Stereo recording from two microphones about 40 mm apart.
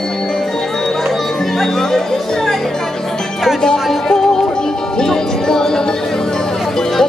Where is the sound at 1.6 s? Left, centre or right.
Centre.